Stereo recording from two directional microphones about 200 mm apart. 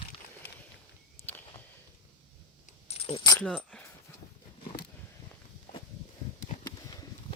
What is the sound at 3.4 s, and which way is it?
Speech, 5° left (ahead or behind).